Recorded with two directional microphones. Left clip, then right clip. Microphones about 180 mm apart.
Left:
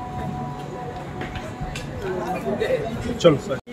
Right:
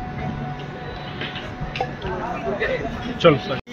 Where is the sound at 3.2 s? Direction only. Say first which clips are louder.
Right 1 dB; 25° right (ahead or behind).